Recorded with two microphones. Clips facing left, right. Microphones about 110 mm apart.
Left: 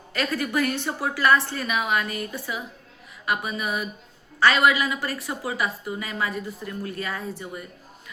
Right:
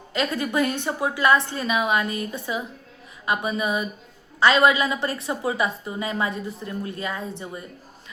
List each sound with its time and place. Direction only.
0.1 s a woman's voice: 20° right (ahead or behind)